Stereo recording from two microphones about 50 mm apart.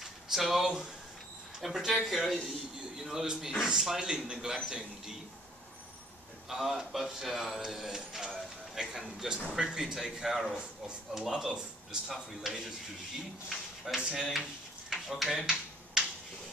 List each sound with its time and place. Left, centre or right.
0.0 s a man's voice: centre
6.5 s a man's voice: centre
14.9 s a sound: centre